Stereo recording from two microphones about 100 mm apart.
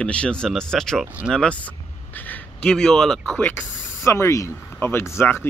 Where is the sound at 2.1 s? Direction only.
15° left (ahead or behind).